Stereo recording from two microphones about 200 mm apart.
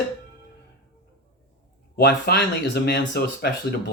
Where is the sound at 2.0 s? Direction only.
50° left (ahead or behind).